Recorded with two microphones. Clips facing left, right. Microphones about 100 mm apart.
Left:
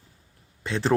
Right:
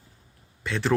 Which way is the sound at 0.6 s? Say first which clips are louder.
Left 1 dB; 30° left (ahead or behind).